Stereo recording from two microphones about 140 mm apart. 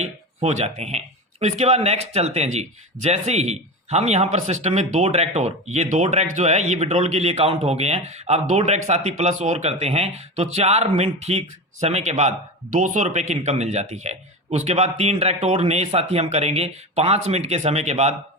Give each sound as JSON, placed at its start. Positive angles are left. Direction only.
{"t": 0.0, "sound": "speech", "side_deg": -55}